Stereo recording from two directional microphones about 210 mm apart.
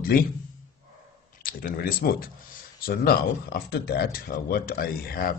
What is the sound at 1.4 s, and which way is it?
Speech, 45° left (ahead or behind).